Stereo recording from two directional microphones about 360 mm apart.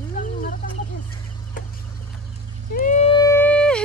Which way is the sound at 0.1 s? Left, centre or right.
Left.